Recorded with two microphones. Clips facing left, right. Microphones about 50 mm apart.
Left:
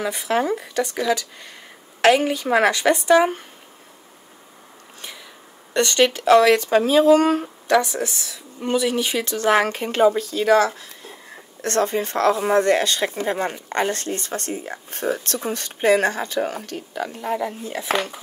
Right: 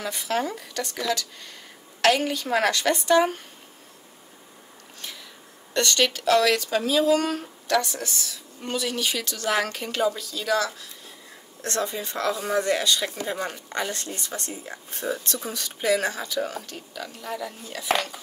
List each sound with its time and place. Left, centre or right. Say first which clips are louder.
0.0 s speech: left 5 dB; centre
5.7 s speech: left 5 dB; left